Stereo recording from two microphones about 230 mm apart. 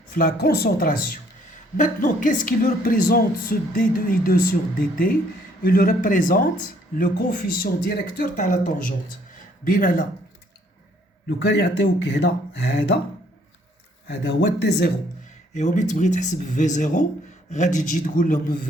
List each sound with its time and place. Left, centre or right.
0.1 s speech: left
11.3 s speech: left
14.1 s speech: left
15.5 s speech: left